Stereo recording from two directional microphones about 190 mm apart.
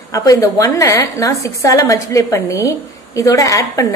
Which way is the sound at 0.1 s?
15° left (ahead or behind).